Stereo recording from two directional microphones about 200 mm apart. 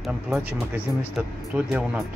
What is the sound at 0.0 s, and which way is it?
Speech, 5° right (ahead or behind).